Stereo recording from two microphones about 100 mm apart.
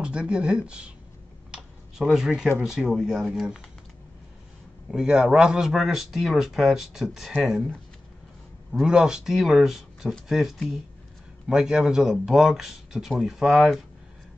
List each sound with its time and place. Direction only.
0.0 s speech: 10° right (ahead or behind)
1.5 s a sound: 5° right (ahead or behind)
2.6 s speech: 5° right (ahead or behind)
4.9 s speech: 5° right (ahead or behind)
8.7 s speech: 5° right (ahead or behind)